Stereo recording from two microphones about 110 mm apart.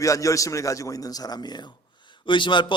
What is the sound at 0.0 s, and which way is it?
A man's voice, 30° left (ahead or behind).